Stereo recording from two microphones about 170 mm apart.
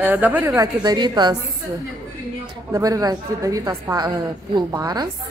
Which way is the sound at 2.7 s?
20° right (ahead or behind).